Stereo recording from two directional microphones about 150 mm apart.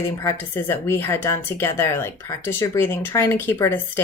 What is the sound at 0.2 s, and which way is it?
Speech, 15° left (ahead or behind).